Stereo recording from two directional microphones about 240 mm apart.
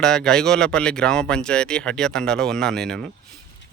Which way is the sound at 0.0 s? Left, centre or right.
Centre.